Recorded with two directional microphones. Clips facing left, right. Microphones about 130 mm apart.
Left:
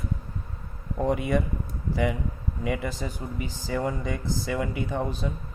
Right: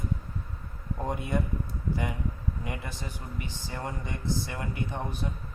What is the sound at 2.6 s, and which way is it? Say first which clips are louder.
Speech: left 8 dB; 90° left.